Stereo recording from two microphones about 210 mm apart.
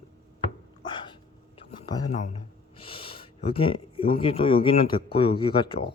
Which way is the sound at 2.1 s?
30° left (ahead or behind).